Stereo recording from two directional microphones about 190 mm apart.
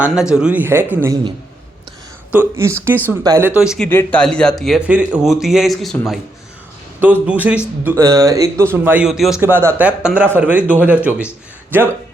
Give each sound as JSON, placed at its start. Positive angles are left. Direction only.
{"t": 0.0, "sound": "speech", "side_deg": -5}
{"t": 2.3, "sound": "speech", "side_deg": -10}
{"t": 3.8, "sound": "speech", "side_deg": 10}
{"t": 7.0, "sound": "speech", "side_deg": -10}